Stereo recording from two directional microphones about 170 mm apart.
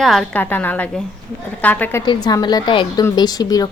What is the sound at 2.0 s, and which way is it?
A woman's voice, 25° left (ahead or behind).